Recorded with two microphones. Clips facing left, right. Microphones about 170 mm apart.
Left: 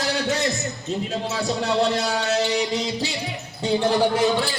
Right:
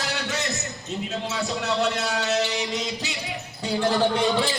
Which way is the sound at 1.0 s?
30° left (ahead or behind).